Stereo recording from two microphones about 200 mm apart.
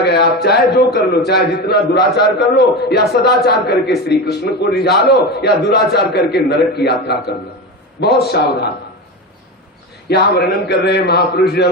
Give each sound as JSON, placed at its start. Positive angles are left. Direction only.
{"t": 0.0, "sound": "a sound", "side_deg": 55}
{"t": 0.4, "sound": "a man's voice", "side_deg": 55}
{"t": 10.1, "sound": "a man's voice", "side_deg": 55}